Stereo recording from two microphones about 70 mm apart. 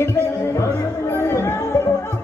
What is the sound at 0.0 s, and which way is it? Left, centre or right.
Music, left.